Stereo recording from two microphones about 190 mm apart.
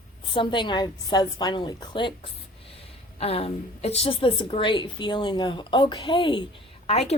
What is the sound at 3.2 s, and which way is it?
A woman's voice, 30° left (ahead or behind).